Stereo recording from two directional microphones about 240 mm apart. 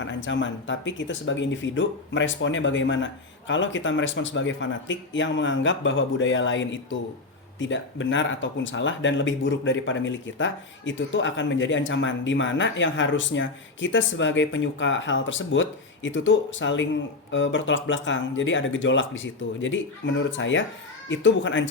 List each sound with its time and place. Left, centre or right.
0.0 s speech: left